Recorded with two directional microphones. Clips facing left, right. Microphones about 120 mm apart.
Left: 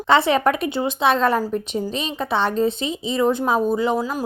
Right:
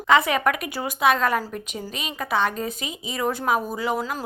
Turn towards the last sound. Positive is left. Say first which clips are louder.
# left 5 dB
turn(degrees=25)  # may be behind; listen again after turning